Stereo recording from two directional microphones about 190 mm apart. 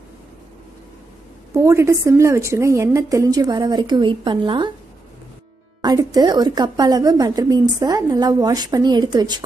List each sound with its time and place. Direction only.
1.5 s a woman's voice: 15° right (ahead or behind)
5.8 s a woman's voice: 20° right (ahead or behind)